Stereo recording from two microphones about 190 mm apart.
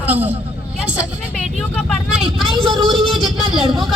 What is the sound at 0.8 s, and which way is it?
Vehicle, 5° right (ahead or behind).